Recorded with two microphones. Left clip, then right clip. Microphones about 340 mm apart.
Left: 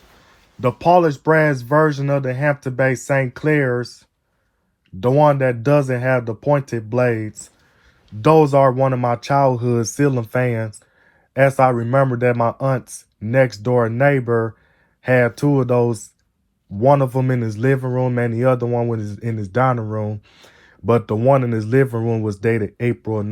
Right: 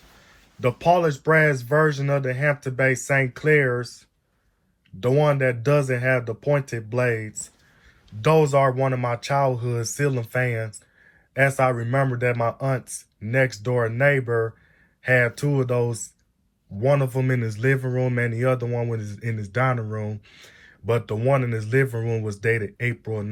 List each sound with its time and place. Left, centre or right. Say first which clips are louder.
0.6 s speech: left 5 dB; centre
8.2 s speech: left 6 dB; centre